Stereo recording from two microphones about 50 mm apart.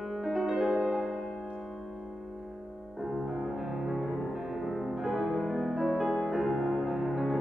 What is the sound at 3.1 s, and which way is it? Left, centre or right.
Music, centre.